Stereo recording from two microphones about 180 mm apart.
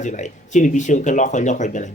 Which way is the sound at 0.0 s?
40° left (ahead or behind).